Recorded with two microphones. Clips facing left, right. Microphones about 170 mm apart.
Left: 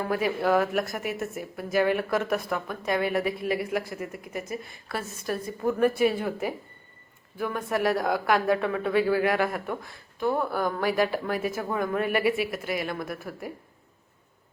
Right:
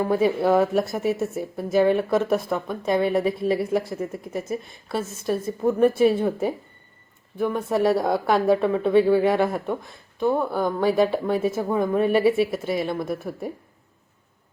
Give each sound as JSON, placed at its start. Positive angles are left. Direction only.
{"t": 0.0, "sound": "speech", "side_deg": -25}